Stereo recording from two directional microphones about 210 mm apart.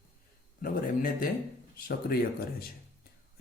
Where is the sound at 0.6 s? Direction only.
40° left (ahead or behind).